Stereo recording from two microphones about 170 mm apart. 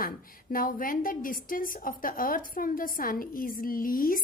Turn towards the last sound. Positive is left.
turn(degrees=55)  # may be behind; listen again after turning